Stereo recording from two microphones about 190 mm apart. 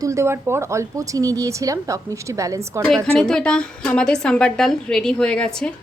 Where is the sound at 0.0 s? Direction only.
15° right (ahead or behind).